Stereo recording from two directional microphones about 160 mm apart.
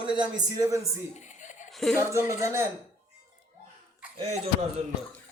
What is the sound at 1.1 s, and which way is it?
Chuckle, 50° left (ahead or behind).